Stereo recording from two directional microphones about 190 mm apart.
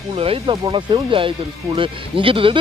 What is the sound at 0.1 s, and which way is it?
Speech, 30° right (ahead or behind).